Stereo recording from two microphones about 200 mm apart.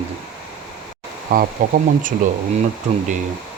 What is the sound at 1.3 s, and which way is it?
Speech, 45° right (ahead or behind).